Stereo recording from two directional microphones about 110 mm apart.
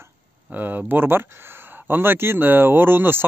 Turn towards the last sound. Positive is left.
turn(degrees=-20)  # may be behind; listen again after turning